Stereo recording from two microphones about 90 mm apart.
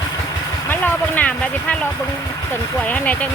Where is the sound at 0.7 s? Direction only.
20° left (ahead or behind).